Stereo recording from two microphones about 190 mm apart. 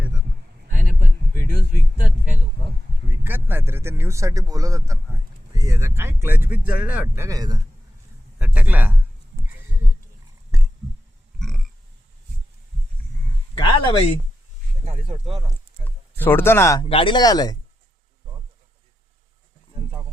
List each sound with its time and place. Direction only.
3.2 s speech: 10° right (ahead or behind)
7.3 s speech: 20° right (ahead or behind)
8.4 s a man's voice: 10° right (ahead or behind)
11.3 s grunt: 5° left (ahead or behind)
13.7 s a sound: 30° left (ahead or behind)
14.8 s speech: 30° right (ahead or behind)
15.8 s speech: 10° left (ahead or behind)
16.8 s speech: 30° left (ahead or behind)